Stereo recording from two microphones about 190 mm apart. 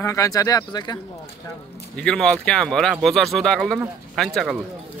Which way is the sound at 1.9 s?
5° left (ahead or behind).